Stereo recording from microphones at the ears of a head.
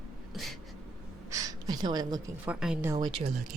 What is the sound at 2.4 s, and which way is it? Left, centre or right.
Speech, centre.